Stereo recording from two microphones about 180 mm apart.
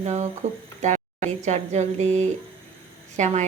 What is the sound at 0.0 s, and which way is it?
A woman's voice, 35° right (ahead or behind).